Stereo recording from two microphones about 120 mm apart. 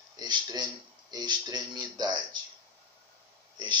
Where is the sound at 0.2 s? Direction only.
35° right (ahead or behind).